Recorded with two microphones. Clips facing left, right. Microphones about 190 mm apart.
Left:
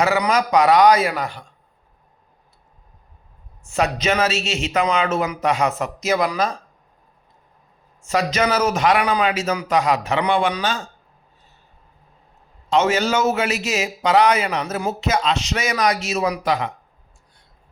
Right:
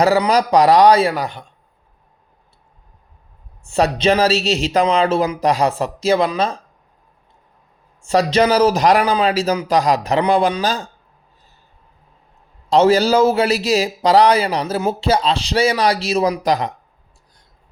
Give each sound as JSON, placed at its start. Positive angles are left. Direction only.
{"t": 0.0, "sound": "a man's voice", "side_deg": -35}
{"t": 3.6, "sound": "speech", "side_deg": -30}
{"t": 8.0, "sound": "speech", "side_deg": -30}
{"t": 12.7, "sound": "speech", "side_deg": -35}